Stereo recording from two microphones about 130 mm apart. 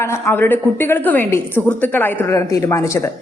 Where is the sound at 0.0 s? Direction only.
20° left (ahead or behind).